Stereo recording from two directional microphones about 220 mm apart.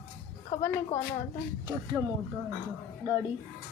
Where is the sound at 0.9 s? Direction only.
35° left (ahead or behind).